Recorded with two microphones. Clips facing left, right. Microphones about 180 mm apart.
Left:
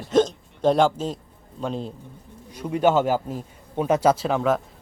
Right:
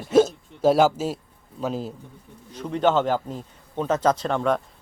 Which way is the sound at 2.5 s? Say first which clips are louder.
Left 1 dB; 10° left (ahead or behind).